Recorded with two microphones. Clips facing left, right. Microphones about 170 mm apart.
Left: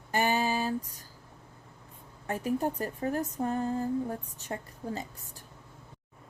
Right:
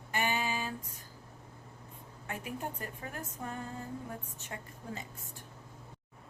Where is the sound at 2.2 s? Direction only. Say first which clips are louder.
Left 10 dB; 35° left (ahead or behind).